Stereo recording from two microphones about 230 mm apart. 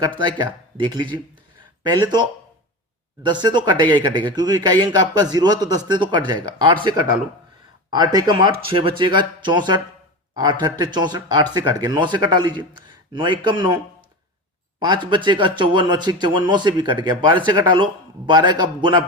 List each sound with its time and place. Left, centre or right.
0.2 s speech: centre
3.2 s speech: centre
7.9 s speech: centre
15.1 s speech: centre